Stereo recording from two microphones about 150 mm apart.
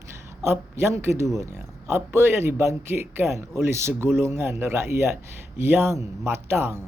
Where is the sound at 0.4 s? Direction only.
15° right (ahead or behind).